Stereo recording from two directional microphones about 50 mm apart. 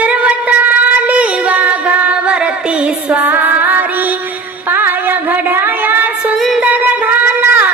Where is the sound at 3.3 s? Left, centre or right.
Right.